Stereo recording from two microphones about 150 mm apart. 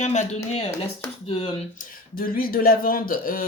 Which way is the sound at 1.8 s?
75° left (ahead or behind).